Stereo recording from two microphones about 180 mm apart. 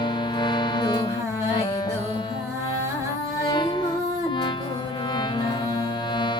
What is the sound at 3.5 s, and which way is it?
Music, 25° left (ahead or behind).